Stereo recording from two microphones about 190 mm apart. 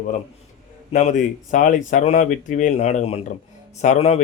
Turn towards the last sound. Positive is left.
turn(degrees=35)  # may be behind; listen again after turning